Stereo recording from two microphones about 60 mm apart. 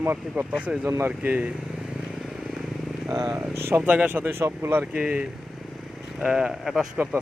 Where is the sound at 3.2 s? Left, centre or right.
Right.